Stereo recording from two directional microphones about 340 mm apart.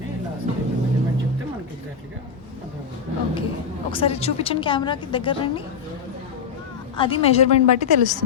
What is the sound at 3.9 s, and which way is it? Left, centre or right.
A woman's voice, centre.